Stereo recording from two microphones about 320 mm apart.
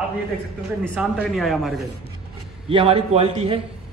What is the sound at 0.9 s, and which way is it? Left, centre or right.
Speech, centre.